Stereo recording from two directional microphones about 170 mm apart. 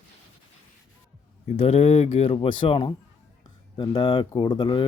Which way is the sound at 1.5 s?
35° left (ahead or behind).